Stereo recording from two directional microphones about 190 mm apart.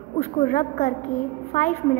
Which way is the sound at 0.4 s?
40° left (ahead or behind).